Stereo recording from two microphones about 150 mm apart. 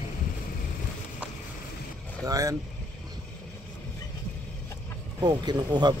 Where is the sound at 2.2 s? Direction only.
20° right (ahead or behind).